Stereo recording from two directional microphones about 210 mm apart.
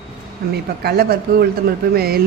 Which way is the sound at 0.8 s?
50° right (ahead or behind).